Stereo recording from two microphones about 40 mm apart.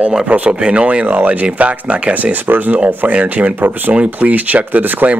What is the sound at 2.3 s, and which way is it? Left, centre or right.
Speech, right.